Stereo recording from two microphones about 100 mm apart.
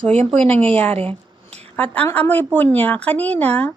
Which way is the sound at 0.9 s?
85° right.